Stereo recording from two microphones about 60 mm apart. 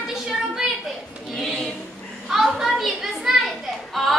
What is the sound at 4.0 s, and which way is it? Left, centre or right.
Yodeling, centre.